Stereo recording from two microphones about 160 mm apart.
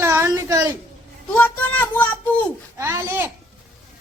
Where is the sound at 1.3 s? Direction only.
10° left (ahead or behind).